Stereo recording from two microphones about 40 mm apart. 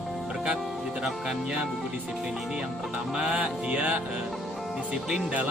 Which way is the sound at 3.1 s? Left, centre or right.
Right.